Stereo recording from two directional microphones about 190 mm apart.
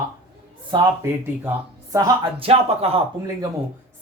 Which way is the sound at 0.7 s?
15° right (ahead or behind).